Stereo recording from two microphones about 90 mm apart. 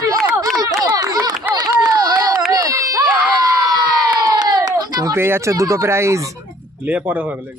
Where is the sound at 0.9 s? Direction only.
45° right (ahead or behind).